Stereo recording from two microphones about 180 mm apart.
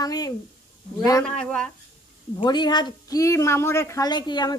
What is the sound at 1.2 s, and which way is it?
Speech, 5° left (ahead or behind).